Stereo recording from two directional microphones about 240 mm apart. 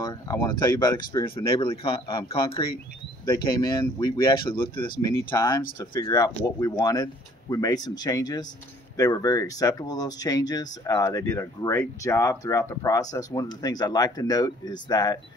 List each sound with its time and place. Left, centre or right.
0.0 s speech: centre